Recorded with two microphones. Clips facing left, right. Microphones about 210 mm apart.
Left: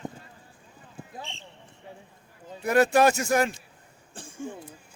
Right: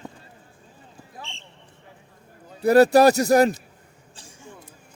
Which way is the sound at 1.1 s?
35° left (ahead or behind).